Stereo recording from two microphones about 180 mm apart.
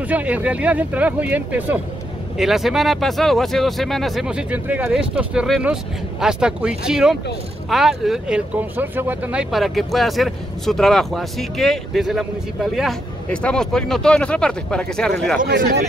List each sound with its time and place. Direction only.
0.1 s speech: 10° right (ahead or behind)
15.4 s speech: 50° right (ahead or behind)